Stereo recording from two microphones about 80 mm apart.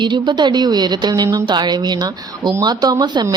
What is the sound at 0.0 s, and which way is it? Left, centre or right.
Speech, right.